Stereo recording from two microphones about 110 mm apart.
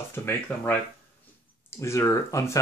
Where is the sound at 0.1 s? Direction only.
20° left (ahead or behind).